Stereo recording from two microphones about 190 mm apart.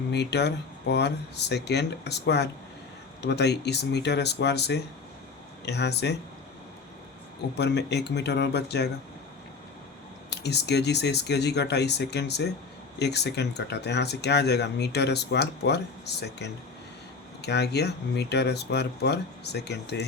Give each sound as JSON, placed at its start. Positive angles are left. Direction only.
{"t": 0.1, "sound": "speech", "side_deg": 60}
{"t": 7.5, "sound": "speech", "side_deg": 60}
{"t": 10.4, "sound": "speech", "side_deg": 60}